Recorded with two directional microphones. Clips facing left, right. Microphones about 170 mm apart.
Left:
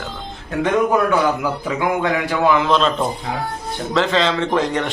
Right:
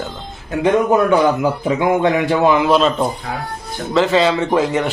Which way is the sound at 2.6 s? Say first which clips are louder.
Right 3 dB; 10° right (ahead or behind).